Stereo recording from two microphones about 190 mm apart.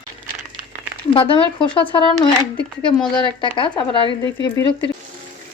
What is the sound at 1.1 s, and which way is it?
Speech, 30° left (ahead or behind).